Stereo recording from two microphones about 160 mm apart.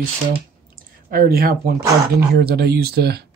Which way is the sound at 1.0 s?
70° right (ahead or behind).